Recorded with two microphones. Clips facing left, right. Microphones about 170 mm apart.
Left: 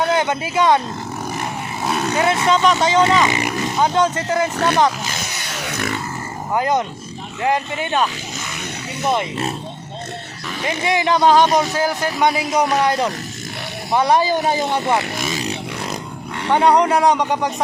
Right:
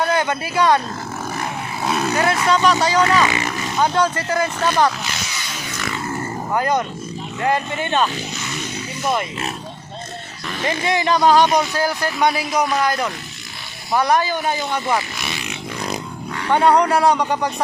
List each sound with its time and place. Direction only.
0.0 s speech: 20° left (ahead or behind)
1.4 s vehicle: centre (ahead or behind)
2.1 s speech: 20° left (ahead or behind)
5.1 s a sound: 55° left (ahead or behind)
6.5 s speech: 20° left (ahead or behind)
9.0 s speech: 25° left (ahead or behind)
10.6 s speech: 15° left (ahead or behind)
12.5 s speech: 25° left (ahead or behind)
15.2 s a sound: 40° left (ahead or behind)
16.4 s speech: 20° left (ahead or behind)